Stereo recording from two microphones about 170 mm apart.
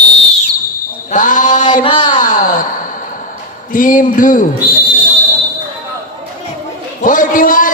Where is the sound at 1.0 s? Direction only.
50° left (ahead or behind).